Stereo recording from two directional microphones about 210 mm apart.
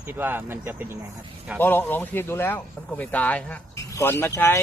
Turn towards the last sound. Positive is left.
turn(degrees=10)  # may be behind; listen again after turning